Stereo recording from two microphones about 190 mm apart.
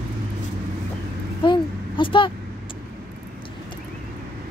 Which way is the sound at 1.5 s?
25° left (ahead or behind).